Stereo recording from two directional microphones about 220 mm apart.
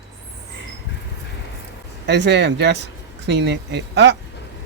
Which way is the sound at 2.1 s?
50° right (ahead or behind).